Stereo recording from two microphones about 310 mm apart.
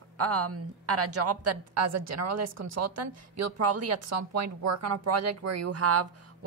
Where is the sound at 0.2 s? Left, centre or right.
Right.